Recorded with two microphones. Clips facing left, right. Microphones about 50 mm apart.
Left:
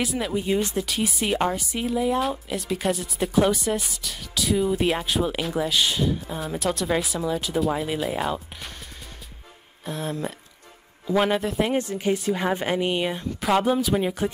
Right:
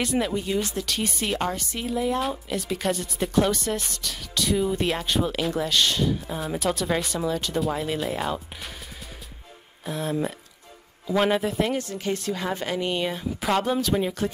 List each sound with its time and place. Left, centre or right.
0.0 s speech: centre
0.4 s speech: centre
0.8 s speech: centre
9.8 s speech: centre
11.7 s a woman's voice: centre
13.2 s a woman's voice: centre